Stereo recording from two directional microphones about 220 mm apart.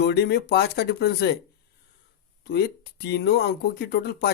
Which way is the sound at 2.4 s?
45° left (ahead or behind).